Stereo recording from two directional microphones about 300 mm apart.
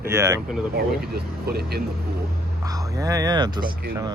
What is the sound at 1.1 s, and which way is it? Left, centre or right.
Speech, right.